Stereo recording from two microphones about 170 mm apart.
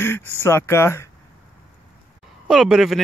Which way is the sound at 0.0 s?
15° left (ahead or behind).